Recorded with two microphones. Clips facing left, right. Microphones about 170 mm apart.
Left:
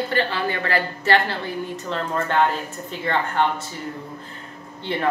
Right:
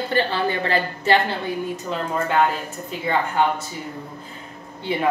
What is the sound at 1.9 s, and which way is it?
Speech, 5° right (ahead or behind).